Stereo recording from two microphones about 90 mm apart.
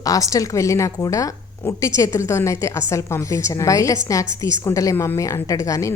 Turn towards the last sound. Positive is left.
turn(degrees=35)  # may be behind; listen again after turning